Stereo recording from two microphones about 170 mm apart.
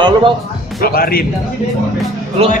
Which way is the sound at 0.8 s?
60° left (ahead or behind).